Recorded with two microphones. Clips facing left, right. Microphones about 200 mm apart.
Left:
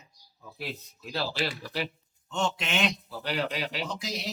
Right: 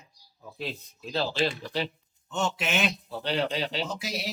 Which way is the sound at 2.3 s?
5° right (ahead or behind).